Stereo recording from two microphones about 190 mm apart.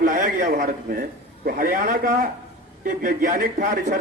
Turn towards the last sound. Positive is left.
turn(degrees=-40)  # may be behind; listen again after turning